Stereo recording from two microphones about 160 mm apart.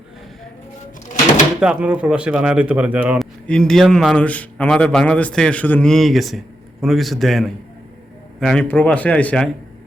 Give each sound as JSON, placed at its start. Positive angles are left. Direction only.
{"t": 1.6, "sound": "speech", "side_deg": -10}
{"t": 3.4, "sound": "a man's voice", "side_deg": 5}